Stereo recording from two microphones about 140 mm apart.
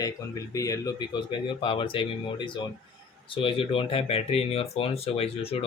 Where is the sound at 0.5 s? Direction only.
25° left (ahead or behind).